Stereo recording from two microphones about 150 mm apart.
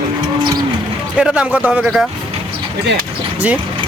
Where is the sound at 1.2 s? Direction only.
5° right (ahead or behind).